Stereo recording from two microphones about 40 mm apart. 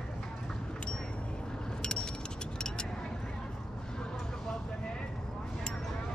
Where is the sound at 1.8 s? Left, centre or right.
Centre.